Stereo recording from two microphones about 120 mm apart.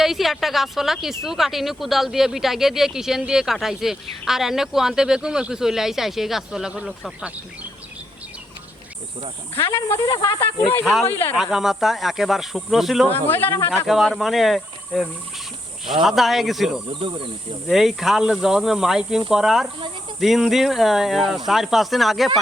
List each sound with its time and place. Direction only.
0.0 s speech: centre (ahead or behind)
10.1 s speech: 30° left (ahead or behind)
11.0 s speech: 20° left (ahead or behind)
11.3 s speech: 5° right (ahead or behind)
13.1 s speech: 15° left (ahead or behind)
13.8 s speech: centre (ahead or behind)
16.9 s speech: 45° right (ahead or behind)
17.7 s speech: centre (ahead or behind)